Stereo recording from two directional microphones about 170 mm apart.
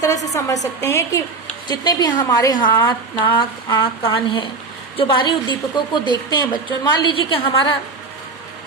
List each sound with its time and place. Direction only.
0.3 s a woman's voice: 20° left (ahead or behind)